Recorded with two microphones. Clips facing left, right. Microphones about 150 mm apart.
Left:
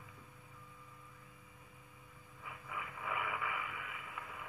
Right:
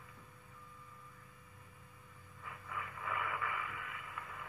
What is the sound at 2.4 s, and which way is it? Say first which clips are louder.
Radio: even; 10° left (ahead or behind).